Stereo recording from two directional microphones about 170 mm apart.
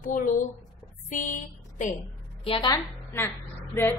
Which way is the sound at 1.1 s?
50° left (ahead or behind).